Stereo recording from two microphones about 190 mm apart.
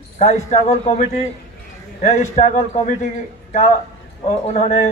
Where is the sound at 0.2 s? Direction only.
35° left (ahead or behind).